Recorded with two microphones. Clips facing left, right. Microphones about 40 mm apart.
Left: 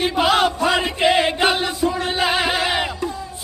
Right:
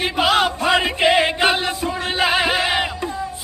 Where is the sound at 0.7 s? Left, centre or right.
Right.